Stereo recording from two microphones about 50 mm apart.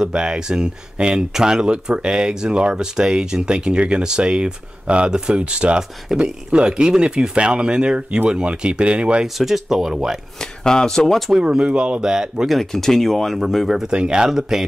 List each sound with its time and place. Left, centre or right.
0.0 s speech: centre
9.2 s speech: centre
10.4 s speech: centre
11.3 s speech: centre
12.4 s speech: centre
13.9 s speech: centre